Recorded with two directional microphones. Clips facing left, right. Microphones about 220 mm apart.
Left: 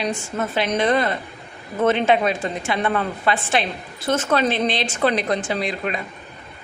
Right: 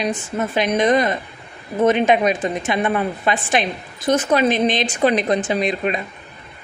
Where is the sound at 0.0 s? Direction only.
15° right (ahead or behind).